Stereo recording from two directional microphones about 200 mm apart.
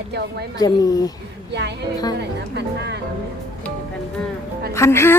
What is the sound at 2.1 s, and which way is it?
Speech, 55° right (ahead or behind).